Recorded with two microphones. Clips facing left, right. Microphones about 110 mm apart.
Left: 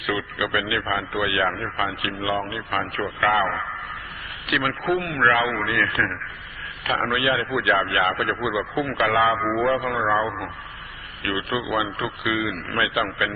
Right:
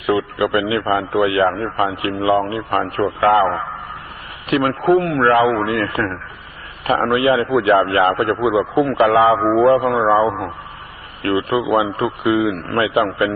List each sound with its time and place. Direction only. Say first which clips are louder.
0.0 s a man's voice: right 9 dB; 35° right (ahead or behind)